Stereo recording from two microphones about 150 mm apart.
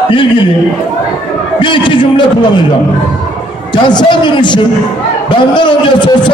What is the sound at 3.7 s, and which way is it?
A man's voice, 30° left (ahead or behind).